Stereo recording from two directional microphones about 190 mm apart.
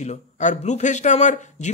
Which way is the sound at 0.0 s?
40° left (ahead or behind).